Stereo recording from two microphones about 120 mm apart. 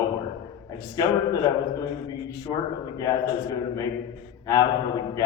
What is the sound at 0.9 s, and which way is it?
Speech, 30° left (ahead or behind).